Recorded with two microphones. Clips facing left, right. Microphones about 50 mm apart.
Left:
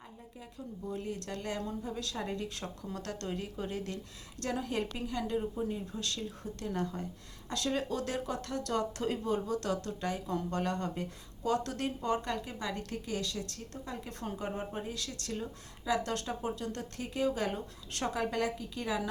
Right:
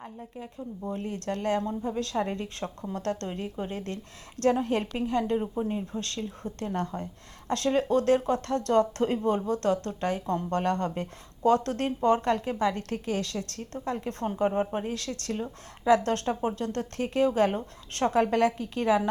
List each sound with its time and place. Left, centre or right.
0.3 s speech: right
15.3 s speech: right
15.9 s speech: right